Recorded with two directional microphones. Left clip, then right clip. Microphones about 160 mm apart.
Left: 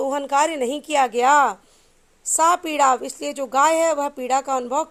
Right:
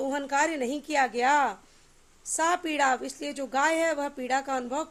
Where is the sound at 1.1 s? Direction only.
35° left (ahead or behind).